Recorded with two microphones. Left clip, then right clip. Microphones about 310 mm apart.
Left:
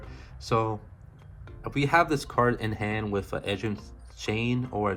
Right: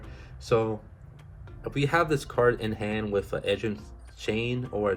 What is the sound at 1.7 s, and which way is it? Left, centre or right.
Speech, left.